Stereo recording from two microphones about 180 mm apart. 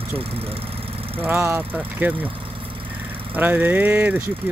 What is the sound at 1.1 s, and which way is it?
Speech, 10° right (ahead or behind).